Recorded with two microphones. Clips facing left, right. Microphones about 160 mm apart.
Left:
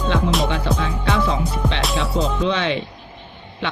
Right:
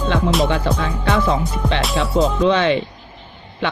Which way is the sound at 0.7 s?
50° right (ahead or behind).